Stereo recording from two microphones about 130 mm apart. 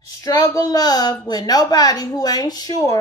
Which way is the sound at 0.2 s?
25° left (ahead or behind).